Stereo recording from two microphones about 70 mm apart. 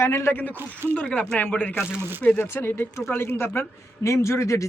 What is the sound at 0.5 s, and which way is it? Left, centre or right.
Speech, right.